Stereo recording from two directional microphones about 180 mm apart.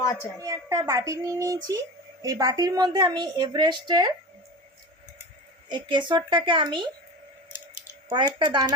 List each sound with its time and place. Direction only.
0.0 s a woman's voice: 20° left (ahead or behind)
0.3 s a child's voice: 20° right (ahead or behind)
5.7 s a woman's voice: 25° right (ahead or behind)
8.1 s a woman's voice: 25° right (ahead or behind)